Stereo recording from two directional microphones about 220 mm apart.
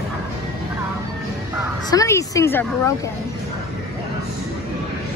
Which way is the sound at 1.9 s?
15° left (ahead or behind).